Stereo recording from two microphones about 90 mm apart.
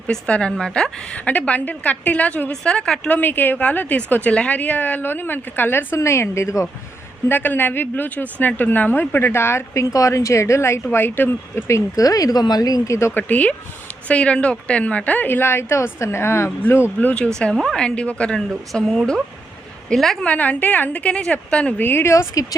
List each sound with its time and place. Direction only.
0.1 s a woman's voice: 10° left (ahead or behind)
3.1 s a woman's voice: 20° left (ahead or behind)
7.3 s a woman's voice: 20° left (ahead or behind)
11.9 s speech: 40° left (ahead or behind)
13.0 s a woman's voice: 30° left (ahead or behind)
13.2 s a woman's voice: 15° left (ahead or behind)
17.4 s a woman's voice: 5° left (ahead or behind)
18.7 s speech: centre (ahead or behind)
20.2 s a woman's voice: 15° left (ahead or behind); by 22.4 s 35° left (ahead or behind)